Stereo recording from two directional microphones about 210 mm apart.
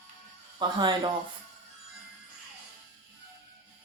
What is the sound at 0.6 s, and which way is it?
Speech, 20° right (ahead or behind).